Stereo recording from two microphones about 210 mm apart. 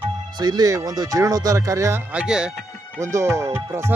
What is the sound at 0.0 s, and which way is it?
Speech, 20° right (ahead or behind).